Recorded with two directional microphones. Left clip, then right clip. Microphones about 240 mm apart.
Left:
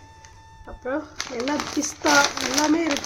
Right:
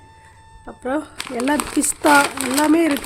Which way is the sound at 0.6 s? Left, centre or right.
Right.